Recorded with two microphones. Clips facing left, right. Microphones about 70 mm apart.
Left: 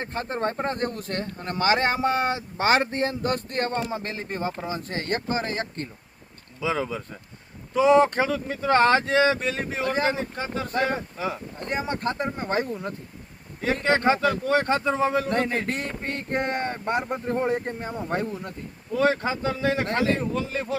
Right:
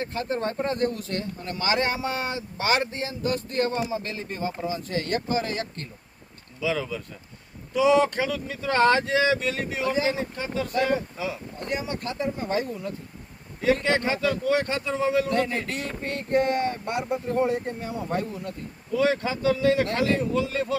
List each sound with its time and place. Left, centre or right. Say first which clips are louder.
0.0 s speech: even; left
7.7 s speech: left 2 dB; left